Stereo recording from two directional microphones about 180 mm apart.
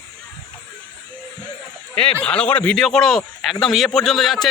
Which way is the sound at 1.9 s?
5° left (ahead or behind).